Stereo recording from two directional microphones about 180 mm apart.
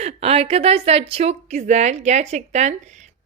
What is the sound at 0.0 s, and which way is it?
A woman's voice, 35° right (ahead or behind).